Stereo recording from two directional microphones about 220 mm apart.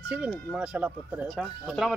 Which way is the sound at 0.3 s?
5° left (ahead or behind).